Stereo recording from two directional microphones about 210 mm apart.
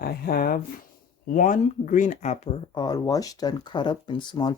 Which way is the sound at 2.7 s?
20° left (ahead or behind).